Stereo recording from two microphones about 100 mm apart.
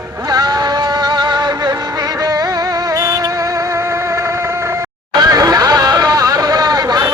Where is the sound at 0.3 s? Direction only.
45° right (ahead or behind).